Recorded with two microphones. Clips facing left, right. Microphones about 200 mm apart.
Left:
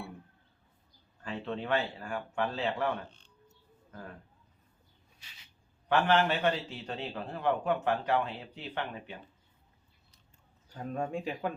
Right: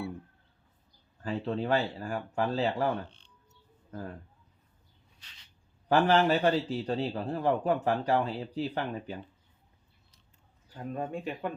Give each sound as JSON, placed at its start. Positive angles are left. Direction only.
{"t": 1.2, "sound": "a man's voice", "side_deg": -35}
{"t": 3.1, "sound": "music", "side_deg": 45}
{"t": 5.2, "sound": "a sound", "side_deg": 10}
{"t": 5.9, "sound": "a man's voice", "side_deg": -35}
{"t": 10.8, "sound": "speech", "side_deg": 0}